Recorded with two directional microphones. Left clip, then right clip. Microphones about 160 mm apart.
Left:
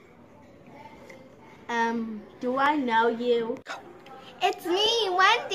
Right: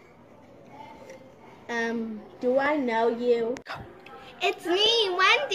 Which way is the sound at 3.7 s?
20° left (ahead or behind).